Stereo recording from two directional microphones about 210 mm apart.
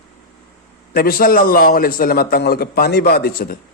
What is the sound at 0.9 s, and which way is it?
A man's voice, 45° left (ahead or behind).